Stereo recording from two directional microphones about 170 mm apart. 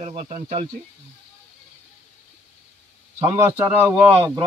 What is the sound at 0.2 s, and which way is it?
Speech, 45° right (ahead or behind).